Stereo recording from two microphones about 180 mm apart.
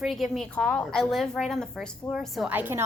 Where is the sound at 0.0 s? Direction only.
Centre (ahead or behind).